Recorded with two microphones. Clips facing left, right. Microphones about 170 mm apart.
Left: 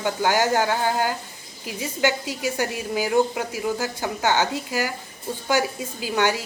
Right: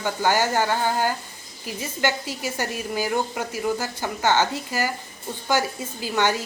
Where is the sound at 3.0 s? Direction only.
15° left (ahead or behind).